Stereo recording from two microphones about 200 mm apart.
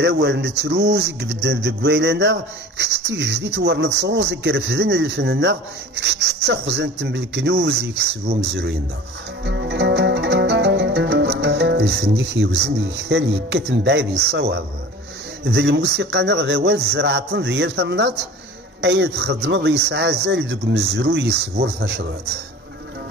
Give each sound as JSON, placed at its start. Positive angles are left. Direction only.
{"t": 0.0, "sound": "speech", "side_deg": -55}
{"t": 9.4, "sound": "music", "side_deg": -60}
{"t": 12.2, "sound": "speech", "side_deg": -55}